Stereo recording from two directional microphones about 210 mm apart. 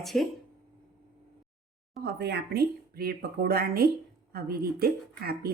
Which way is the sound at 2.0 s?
55° right (ahead or behind).